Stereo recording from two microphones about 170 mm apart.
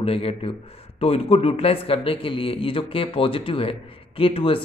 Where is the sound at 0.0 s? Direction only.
35° left (ahead or behind).